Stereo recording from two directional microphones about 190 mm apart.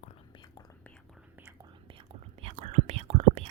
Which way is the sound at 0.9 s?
Centre (ahead or behind).